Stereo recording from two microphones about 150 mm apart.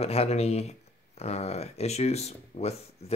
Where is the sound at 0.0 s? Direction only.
45° left (ahead or behind).